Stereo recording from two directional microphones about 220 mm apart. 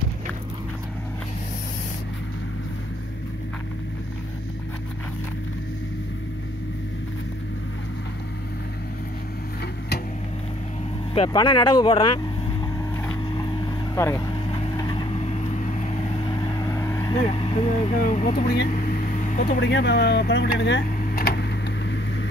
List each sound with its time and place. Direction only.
11.1 s speech: 20° left (ahead or behind)
13.0 s vehicle: 10° left (ahead or behind); by 20.8 s 50° left (ahead or behind)
21.0 s a sound: 45° left (ahead or behind)